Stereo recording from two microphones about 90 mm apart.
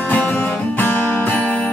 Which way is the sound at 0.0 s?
15° left (ahead or behind).